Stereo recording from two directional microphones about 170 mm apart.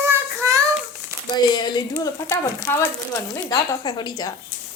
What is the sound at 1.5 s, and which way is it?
Speech, 25° left (ahead or behind).